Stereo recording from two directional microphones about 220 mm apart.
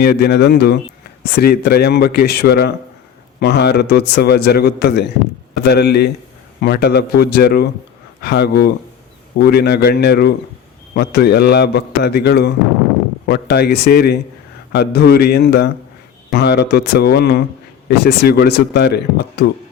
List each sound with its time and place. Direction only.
0.0 s a man's voice: 45° left (ahead or behind)